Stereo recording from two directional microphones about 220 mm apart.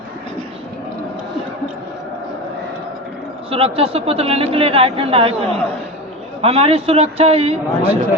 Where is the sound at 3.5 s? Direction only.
25° right (ahead or behind).